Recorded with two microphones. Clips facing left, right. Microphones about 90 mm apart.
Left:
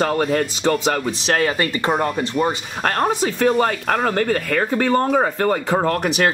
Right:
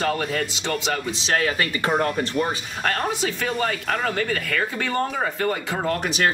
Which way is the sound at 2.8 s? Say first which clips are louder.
Left 5 dB; 45° left (ahead or behind).